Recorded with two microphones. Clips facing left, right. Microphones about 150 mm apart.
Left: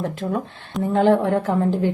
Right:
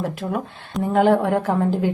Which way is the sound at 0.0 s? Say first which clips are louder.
Left 1 dB; 15° right (ahead or behind).